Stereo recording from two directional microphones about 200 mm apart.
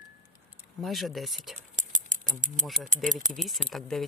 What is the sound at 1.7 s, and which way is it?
Rattle, 40° right (ahead or behind).